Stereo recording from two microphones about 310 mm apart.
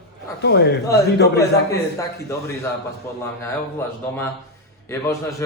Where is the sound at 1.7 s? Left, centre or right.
Centre.